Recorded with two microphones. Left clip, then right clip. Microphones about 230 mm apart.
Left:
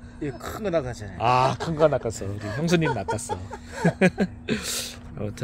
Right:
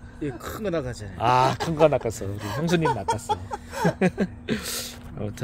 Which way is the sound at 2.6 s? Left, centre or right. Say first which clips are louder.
Even; centre.